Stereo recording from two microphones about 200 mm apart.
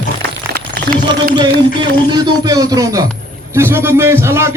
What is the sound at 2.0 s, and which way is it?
A man's voice, 20° right (ahead or behind).